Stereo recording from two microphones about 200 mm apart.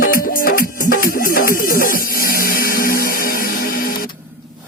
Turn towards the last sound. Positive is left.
turn(degrees=45)  # may be behind; listen again after turning